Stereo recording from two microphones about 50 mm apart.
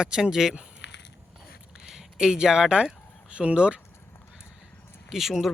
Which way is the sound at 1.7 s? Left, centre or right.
Centre.